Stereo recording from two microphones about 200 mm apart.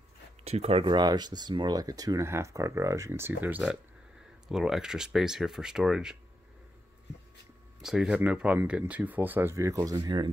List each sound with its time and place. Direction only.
0.4 s speech: 30° right (ahead or behind); by 6.1 s 5° right (ahead or behind)
7.8 s speech: centre (ahead or behind); by 10.3 s 20° right (ahead or behind)